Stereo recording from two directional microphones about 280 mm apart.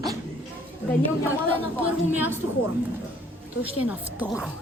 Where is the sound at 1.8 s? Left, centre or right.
Centre.